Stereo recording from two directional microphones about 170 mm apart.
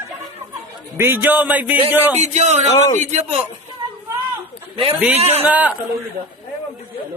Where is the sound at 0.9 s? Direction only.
15° right (ahead or behind).